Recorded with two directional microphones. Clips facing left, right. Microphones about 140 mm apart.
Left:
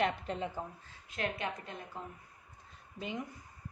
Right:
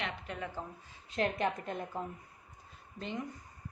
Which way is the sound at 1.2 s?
40° right (ahead or behind).